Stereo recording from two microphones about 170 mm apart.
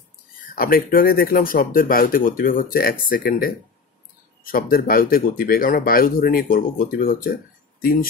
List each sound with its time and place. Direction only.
0.6 s speech: 60° left (ahead or behind)